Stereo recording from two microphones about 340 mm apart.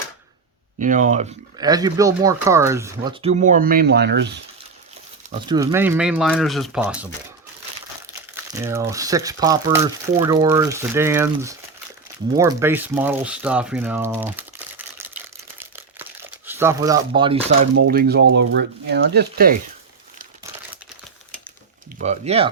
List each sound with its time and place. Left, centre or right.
0.8 s speech: right
5.3 s speech: centre
8.5 s speech: centre
15.5 s a sound: centre
16.5 s speech: centre; by 19.5 s right
21.9 s speech: right